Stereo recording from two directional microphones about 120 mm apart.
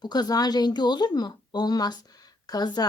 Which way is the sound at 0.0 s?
35° left (ahead or behind).